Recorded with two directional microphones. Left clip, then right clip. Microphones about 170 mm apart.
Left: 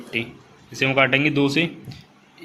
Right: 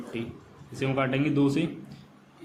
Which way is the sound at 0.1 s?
10° left (ahead or behind).